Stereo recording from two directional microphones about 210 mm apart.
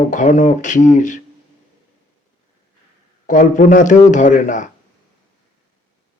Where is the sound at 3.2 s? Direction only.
35° left (ahead or behind).